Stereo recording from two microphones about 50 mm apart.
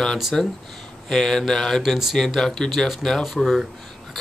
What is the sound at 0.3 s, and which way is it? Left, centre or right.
Speech, centre.